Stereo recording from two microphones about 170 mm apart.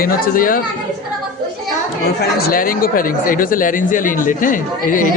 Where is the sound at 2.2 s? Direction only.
65° left (ahead or behind).